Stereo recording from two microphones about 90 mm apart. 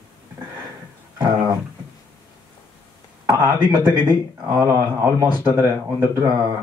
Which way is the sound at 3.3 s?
40° right (ahead or behind).